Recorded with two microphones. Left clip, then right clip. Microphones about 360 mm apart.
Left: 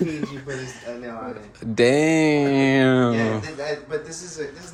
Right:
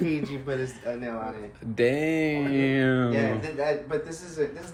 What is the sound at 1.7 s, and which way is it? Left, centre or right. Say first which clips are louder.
Speech: left 7 dB; centre.